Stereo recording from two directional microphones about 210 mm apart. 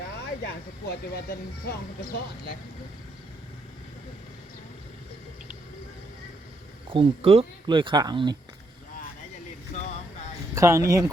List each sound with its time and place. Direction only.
0.4 s speech: 50° left (ahead or behind)
6.9 s speech: 25° right (ahead or behind)
9.7 s a sound: 30° left (ahead or behind)
10.5 s speech: 15° right (ahead or behind)